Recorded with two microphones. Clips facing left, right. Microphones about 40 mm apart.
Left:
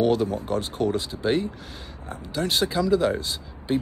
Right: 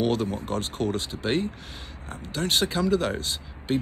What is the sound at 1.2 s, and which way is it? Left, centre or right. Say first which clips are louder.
Speech: left 2 dB; right.